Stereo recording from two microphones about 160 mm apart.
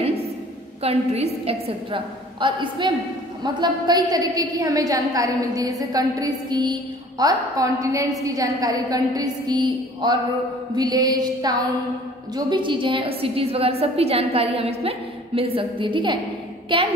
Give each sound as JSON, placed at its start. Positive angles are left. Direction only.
{"t": 0.8, "sound": "a woman's voice", "side_deg": -40}